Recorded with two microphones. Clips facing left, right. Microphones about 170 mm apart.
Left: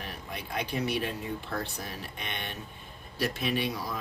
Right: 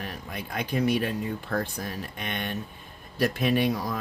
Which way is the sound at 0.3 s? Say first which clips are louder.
Right 2 dB; 50° right (ahead or behind).